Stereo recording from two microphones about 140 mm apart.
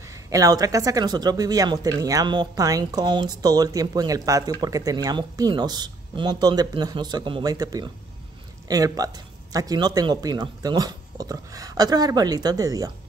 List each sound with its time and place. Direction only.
0.0 s speech: 25° right (ahead or behind)